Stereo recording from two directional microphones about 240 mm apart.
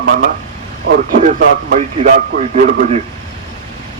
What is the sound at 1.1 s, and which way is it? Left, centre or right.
A man's voice, right.